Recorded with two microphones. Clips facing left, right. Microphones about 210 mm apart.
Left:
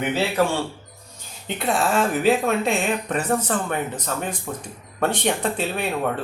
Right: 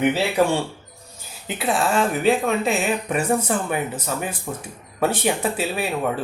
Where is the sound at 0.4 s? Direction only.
15° right (ahead or behind).